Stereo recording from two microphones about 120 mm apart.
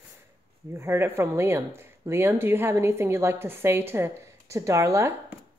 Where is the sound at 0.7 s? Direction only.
20° right (ahead or behind).